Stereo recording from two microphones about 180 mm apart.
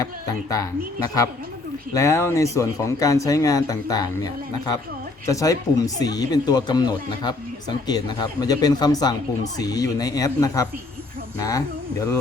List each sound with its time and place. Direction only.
0.0 s speech: 20° left (ahead or behind)